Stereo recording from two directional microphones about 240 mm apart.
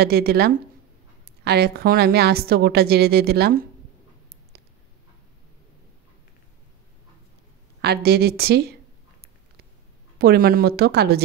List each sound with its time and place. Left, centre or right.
0.0 s a woman's voice: right
7.8 s a woman's voice: right
10.1 s a woman's voice: right